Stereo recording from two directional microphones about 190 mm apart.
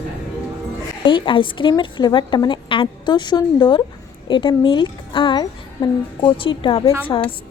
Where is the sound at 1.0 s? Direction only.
25° left (ahead or behind).